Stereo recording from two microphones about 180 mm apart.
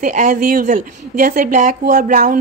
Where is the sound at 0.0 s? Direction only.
45° right (ahead or behind).